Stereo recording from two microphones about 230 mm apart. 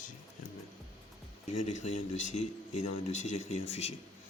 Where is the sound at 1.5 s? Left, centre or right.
Left.